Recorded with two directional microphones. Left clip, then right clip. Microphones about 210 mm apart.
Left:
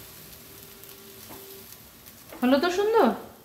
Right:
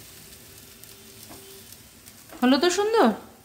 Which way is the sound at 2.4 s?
50° right (ahead or behind).